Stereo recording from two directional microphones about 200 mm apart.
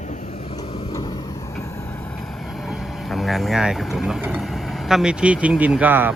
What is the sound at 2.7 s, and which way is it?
Speech, centre (ahead or behind).